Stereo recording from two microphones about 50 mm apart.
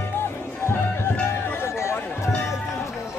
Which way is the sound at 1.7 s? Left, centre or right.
Left.